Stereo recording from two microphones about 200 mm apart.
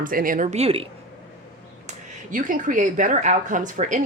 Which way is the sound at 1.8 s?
40° right (ahead or behind).